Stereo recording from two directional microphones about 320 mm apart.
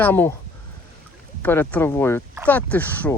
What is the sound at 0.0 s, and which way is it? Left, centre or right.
Speech, centre.